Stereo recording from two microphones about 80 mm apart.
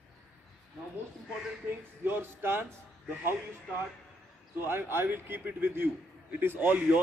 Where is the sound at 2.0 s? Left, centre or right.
Right.